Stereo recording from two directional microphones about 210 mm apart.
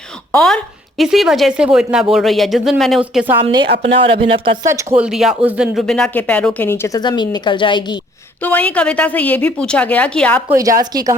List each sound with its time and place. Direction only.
0.3 s speech: 5° left (ahead or behind)
3.8 s speech: 25° right (ahead or behind)
4.6 s speech: 15° right (ahead or behind); by 7.9 s 20° left (ahead or behind)
8.4 s a woman's voice: 5° left (ahead or behind)
10.5 s a woman's voice: 15° right (ahead or behind)